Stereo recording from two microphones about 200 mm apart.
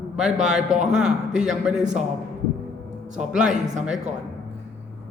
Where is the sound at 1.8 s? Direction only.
35° right (ahead or behind).